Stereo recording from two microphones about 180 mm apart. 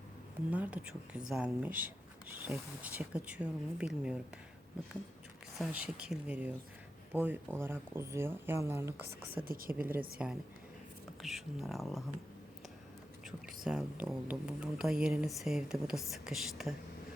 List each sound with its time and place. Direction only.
0.5 s speech: 10° right (ahead or behind)
5.5 s speech: 5° right (ahead or behind)
9.4 s a woman's voice: 50° right (ahead or behind)
9.7 s speech: 10° right (ahead or behind)
13.7 s speech: 5° right (ahead or behind)